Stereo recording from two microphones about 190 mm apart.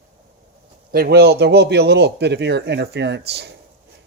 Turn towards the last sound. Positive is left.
turn(degrees=-60)  # may be behind; listen again after turning